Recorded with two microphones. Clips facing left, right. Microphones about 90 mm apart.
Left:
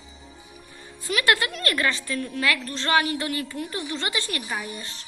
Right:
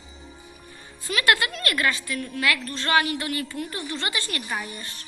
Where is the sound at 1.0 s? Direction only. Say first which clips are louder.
Even; 20° left (ahead or behind).